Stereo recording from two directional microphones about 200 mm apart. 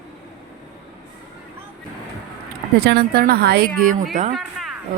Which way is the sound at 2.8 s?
50° right (ahead or behind).